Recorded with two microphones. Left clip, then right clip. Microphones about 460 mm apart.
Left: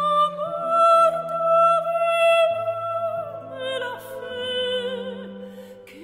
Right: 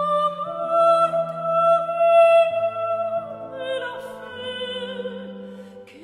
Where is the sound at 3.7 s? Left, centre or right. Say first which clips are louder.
Even; left.